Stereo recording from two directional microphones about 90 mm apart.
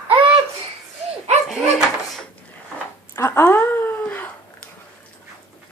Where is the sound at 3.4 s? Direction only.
25° left (ahead or behind).